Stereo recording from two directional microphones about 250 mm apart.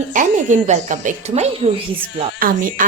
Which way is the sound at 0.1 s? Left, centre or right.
Right.